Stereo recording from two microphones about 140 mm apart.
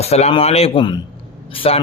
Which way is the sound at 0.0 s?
50° left (ahead or behind).